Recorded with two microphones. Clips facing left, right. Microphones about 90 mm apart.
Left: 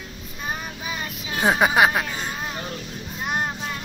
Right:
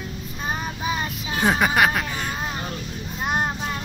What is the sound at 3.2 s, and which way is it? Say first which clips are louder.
Child singing: right 2 dB; 25° right (ahead or behind).